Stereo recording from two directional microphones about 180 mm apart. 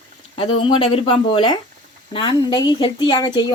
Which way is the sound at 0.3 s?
30° left (ahead or behind).